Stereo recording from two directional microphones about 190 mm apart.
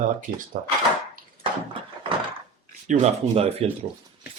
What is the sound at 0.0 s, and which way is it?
Speech, 45° right (ahead or behind).